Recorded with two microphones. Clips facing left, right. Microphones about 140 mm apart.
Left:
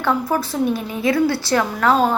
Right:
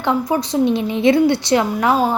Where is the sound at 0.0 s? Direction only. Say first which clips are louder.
Right 2 dB; 15° right (ahead or behind).